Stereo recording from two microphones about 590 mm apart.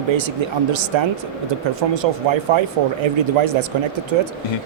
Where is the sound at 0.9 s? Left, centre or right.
Right.